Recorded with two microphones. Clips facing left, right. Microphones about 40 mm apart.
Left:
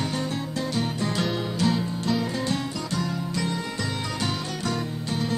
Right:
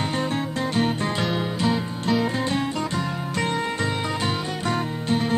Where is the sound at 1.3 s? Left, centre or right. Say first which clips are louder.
Right 1 dB; right.